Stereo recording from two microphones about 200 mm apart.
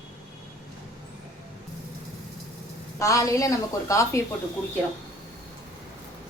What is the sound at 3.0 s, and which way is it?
A woman's voice, 15° left (ahead or behind).